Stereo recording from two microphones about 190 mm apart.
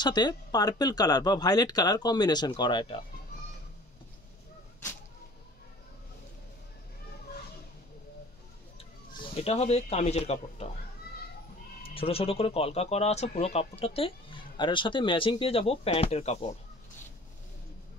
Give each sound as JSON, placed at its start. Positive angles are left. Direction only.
{"t": 0.0, "sound": "speech", "side_deg": 20}
{"t": 9.3, "sound": "speech", "side_deg": 30}
{"t": 11.9, "sound": "speech", "side_deg": 30}